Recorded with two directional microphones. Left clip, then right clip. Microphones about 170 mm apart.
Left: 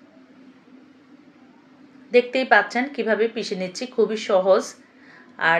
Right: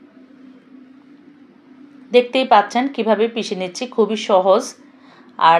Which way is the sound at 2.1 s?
25° right (ahead or behind).